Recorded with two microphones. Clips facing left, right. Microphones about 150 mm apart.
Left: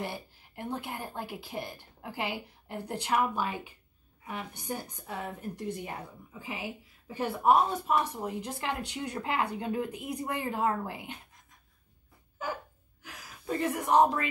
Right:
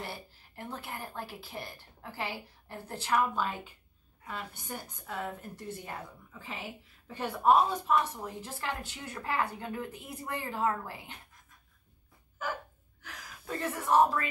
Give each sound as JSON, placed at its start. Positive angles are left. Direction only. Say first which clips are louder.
{"t": 0.0, "sound": "a woman's voice", "louder": "left 4 dB", "side_deg": 15}
{"t": 13.0, "sound": "speech", "louder": "left 4 dB", "side_deg": 15}